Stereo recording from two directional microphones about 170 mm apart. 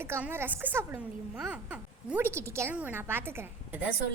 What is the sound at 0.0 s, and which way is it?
A child's voice, 15° right (ahead or behind).